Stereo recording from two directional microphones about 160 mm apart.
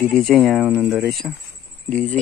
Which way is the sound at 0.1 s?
5° left (ahead or behind).